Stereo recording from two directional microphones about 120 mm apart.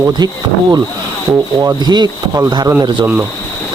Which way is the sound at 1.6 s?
35° right (ahead or behind).